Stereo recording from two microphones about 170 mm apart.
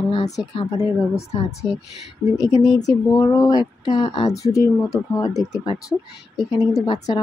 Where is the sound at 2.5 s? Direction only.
25° left (ahead or behind).